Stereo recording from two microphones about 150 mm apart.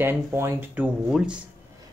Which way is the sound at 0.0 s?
15° right (ahead or behind).